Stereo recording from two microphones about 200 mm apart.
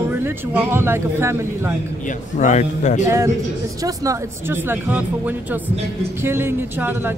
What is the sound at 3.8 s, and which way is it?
A man's voice, 15° right (ahead or behind).